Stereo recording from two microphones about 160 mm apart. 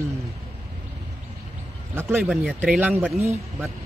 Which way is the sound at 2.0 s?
15° right (ahead or behind).